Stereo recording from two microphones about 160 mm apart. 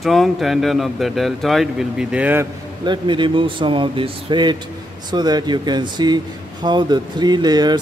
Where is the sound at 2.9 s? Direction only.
30° right (ahead or behind).